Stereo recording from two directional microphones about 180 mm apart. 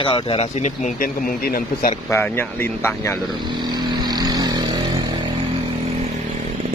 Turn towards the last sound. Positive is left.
turn(degrees=-20)  # may be behind; listen again after turning